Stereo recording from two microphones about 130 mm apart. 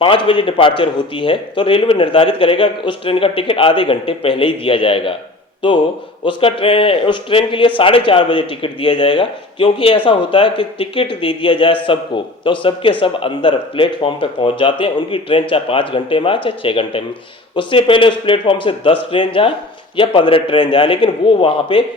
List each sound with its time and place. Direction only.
0.0 s a man's voice: 40° left (ahead or behind)
6.2 s speech: 40° left (ahead or behind)